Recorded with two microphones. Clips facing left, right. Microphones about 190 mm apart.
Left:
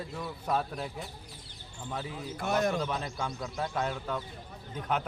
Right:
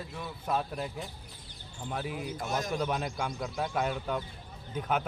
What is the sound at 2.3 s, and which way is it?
Speech, 60° left (ahead or behind).